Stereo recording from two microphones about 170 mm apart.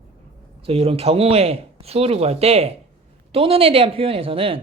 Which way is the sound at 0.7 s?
35° right (ahead or behind).